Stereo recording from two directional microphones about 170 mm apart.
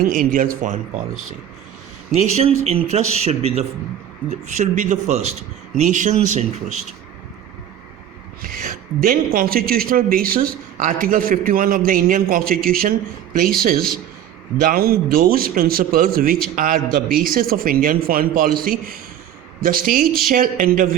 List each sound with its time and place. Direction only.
0.0 s a man's voice: 55° right (ahead or behind)
2.1 s a man's voice: 45° right (ahead or behind)
8.4 s a woman's voice: 55° right (ahead or behind)